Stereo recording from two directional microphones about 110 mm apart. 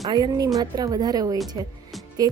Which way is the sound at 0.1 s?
40° right (ahead or behind).